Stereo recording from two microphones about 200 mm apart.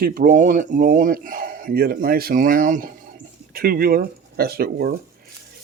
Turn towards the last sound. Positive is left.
turn(degrees=-50)  # may be behind; listen again after turning